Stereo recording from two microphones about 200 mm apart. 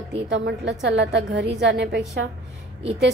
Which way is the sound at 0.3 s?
55° right (ahead or behind).